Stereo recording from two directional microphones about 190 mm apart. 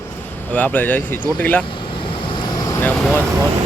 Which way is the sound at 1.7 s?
25° left (ahead or behind).